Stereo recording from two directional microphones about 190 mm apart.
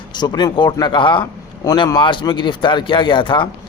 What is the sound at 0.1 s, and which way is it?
Speech, 25° left (ahead or behind).